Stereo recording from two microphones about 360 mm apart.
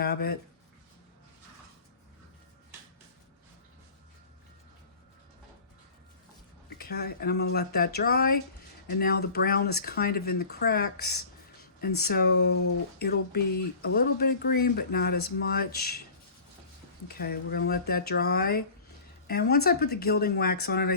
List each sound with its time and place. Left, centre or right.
0.0 s speech: left
6.7 s speech: left
17.1 s speech: left